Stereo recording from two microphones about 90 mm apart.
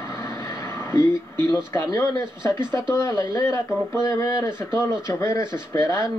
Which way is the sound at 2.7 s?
30° left (ahead or behind).